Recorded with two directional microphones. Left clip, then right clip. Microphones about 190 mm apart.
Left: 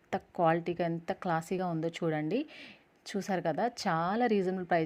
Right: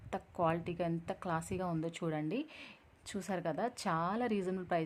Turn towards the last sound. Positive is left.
turn(degrees=15)  # may be behind; listen again after turning